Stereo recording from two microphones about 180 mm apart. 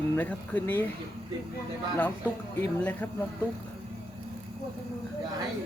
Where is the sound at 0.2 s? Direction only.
10° left (ahead or behind).